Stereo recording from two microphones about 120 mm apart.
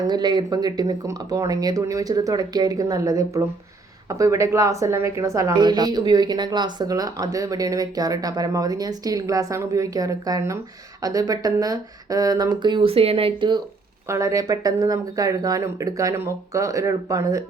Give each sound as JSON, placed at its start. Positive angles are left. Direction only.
{"t": 0.0, "sound": "a woman's voice", "side_deg": -35}
{"t": 14.1, "sound": "speech", "side_deg": -25}